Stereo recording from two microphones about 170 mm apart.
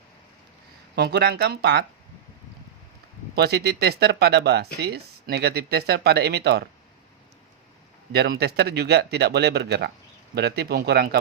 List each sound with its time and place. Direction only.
0.9 s speech: 75° right (ahead or behind)
3.3 s speech: 70° right (ahead or behind)
8.1 s speech: 70° right (ahead or behind)